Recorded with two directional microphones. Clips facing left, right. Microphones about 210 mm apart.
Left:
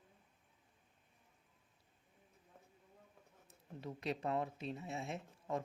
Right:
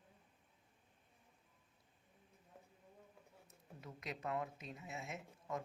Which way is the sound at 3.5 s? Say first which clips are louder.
Left 8 dB; 30° left (ahead or behind).